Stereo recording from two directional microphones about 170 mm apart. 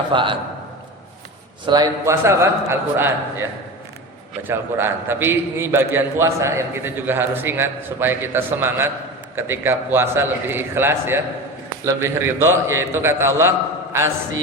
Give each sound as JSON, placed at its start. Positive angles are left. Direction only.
{"t": 0.1, "sound": "a man's voice", "side_deg": -30}
{"t": 1.6, "sound": "a man's voice", "side_deg": -25}
{"t": 4.4, "sound": "a man's voice", "side_deg": -15}